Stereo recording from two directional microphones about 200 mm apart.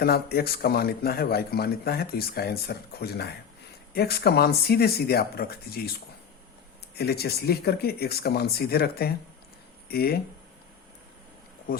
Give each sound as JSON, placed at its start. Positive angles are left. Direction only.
{"t": 0.0, "sound": "a man's voice", "side_deg": 50}